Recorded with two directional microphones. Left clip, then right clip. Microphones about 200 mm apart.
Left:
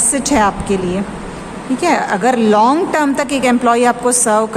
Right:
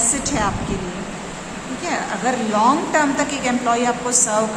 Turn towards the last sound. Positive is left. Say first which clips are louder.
# left 6 dB
turn(degrees=55)  # may be behind; listen again after turning